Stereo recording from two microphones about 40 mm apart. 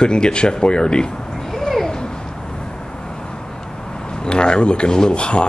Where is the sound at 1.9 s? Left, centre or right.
Centre.